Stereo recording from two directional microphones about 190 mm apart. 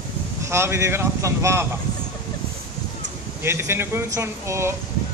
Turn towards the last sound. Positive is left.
turn(degrees=-15)  # may be behind; listen again after turning